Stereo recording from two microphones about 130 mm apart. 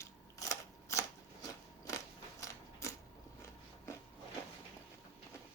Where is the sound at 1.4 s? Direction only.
25° left (ahead or behind).